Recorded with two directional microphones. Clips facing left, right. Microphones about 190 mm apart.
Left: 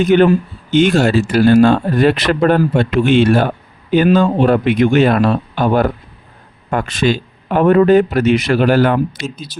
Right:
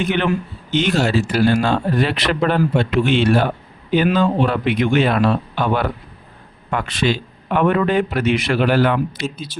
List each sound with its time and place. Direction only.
0.0 s speech: 40° left (ahead or behind)